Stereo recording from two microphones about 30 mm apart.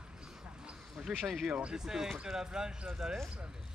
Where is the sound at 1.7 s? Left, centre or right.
Centre.